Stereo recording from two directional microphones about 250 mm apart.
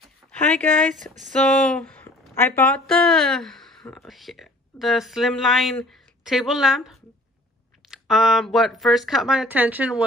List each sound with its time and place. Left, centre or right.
0.3 s speech: centre